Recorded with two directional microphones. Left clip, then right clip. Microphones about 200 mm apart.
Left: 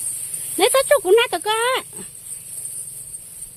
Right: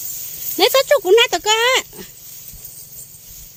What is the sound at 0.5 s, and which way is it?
Speech, 10° right (ahead or behind).